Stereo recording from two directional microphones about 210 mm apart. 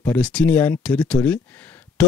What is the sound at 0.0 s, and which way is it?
Speech, 5° left (ahead or behind).